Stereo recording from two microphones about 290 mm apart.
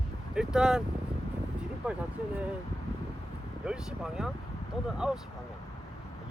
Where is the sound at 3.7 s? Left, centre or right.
Centre.